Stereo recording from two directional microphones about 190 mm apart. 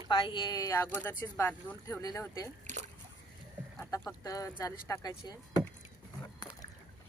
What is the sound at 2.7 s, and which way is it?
Splash, 40° right (ahead or behind).